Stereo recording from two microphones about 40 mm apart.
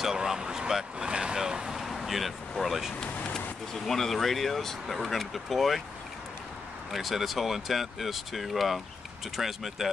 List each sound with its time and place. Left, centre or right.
0.0 s speech: centre
1.0 s vehicle: right
1.7 s vehicle: centre
3.7 s speech: centre
6.9 s speech: centre